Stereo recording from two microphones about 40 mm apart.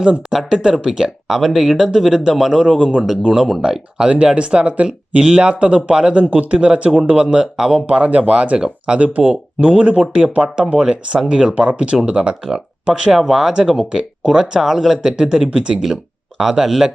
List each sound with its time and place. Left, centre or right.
0.0 s speech: centre
4.1 s speech: right
7.9 s speech: right
12.9 s speech: centre
15.2 s speech: centre
16.4 s speech: centre